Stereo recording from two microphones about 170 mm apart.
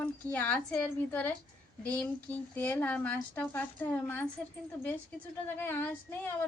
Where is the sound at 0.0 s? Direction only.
10° left (ahead or behind).